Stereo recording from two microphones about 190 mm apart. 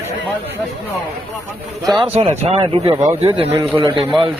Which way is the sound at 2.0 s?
30° right (ahead or behind).